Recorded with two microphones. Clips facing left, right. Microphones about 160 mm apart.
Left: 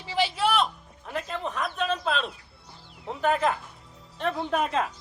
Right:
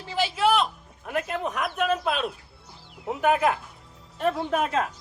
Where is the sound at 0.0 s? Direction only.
Centre (ahead or behind).